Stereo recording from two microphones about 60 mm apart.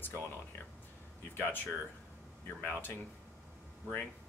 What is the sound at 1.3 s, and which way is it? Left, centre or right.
Speech, left.